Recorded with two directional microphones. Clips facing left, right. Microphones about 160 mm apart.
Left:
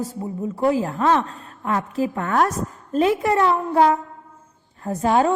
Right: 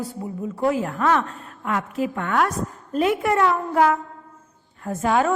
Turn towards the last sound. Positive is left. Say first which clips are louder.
# left 2 dB
turn(degrees=30)  # may be behind; listen again after turning